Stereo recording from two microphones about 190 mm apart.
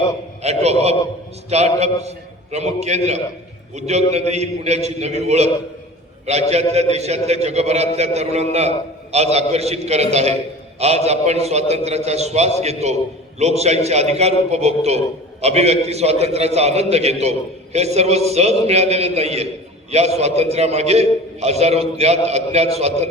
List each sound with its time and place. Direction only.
0.4 s a man's voice: 35° right (ahead or behind)